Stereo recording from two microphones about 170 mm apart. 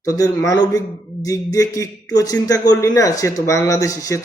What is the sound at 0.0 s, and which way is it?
A man's voice, 20° left (ahead or behind).